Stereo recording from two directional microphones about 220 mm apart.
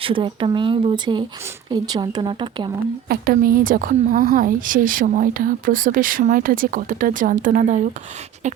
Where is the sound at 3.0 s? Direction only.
45° right (ahead or behind).